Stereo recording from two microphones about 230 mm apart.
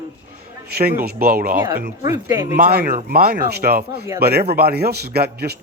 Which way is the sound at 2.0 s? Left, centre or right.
Centre.